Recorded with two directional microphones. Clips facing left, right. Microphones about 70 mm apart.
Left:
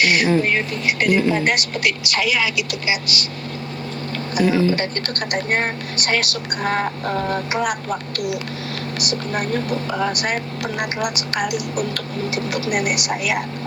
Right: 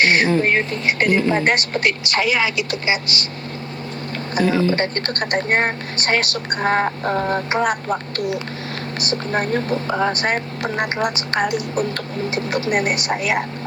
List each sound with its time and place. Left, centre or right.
0.0 s speech: right
4.4 s speech: centre
4.7 s speech: right